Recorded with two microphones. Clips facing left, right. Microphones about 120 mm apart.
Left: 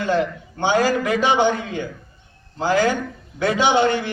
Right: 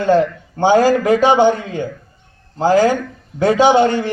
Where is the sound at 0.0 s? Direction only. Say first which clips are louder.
Right 7 dB; 40° right (ahead or behind).